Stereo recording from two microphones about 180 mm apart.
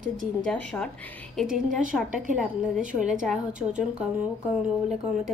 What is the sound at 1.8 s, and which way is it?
Speech, 45° right (ahead or behind).